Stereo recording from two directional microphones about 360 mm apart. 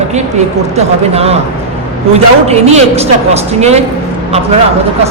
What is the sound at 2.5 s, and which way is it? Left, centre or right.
Speech, centre.